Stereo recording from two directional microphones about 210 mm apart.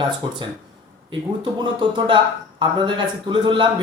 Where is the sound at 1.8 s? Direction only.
25° right (ahead or behind).